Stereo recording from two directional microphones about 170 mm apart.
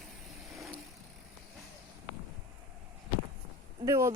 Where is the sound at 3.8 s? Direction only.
15° right (ahead or behind).